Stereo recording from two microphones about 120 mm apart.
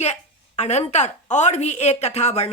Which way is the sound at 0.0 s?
70° left (ahead or behind).